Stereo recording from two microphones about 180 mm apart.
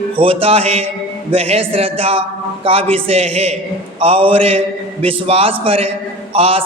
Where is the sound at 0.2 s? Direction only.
30° right (ahead or behind).